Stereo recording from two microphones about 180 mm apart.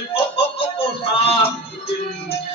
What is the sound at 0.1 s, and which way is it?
Music, 30° left (ahead or behind).